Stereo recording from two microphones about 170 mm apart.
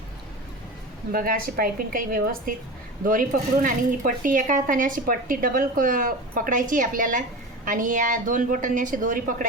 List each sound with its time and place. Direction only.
1.1 s a woman's voice: 55° right (ahead or behind)